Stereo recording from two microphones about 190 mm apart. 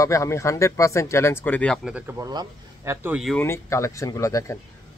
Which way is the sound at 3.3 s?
15° left (ahead or behind).